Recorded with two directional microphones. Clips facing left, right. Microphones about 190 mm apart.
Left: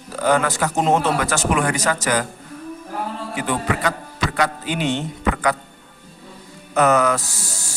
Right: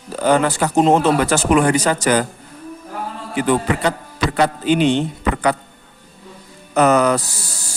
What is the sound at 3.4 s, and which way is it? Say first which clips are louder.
A man's voice: right 5 dB; 30° right (ahead or behind).